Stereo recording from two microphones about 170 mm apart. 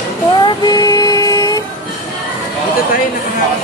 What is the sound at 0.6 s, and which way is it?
Music, 25° left (ahead or behind).